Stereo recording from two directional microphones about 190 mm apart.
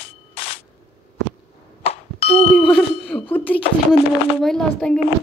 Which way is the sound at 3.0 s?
10° left (ahead or behind).